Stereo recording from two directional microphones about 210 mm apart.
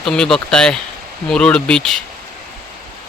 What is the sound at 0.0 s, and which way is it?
A man's voice, centre (ahead or behind).